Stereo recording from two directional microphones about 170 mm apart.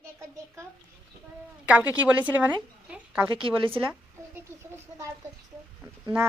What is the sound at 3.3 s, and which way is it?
Speech, 30° right (ahead or behind).